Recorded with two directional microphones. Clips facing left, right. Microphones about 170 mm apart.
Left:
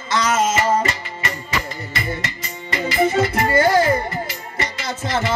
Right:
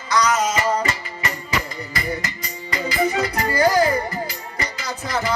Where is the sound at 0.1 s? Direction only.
25° left (ahead or behind).